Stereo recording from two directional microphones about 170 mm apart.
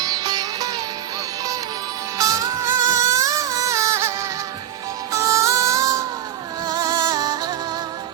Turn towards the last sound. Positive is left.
turn(degrees=-25)  # may be behind; listen again after turning